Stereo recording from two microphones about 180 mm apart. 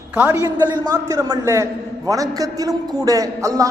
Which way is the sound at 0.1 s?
10° right (ahead or behind).